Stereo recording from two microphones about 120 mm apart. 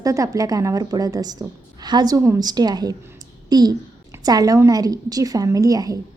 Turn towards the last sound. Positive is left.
turn(degrees=-30)  # may be behind; listen again after turning